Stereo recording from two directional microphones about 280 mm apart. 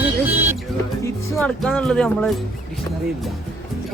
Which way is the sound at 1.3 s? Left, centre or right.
Centre.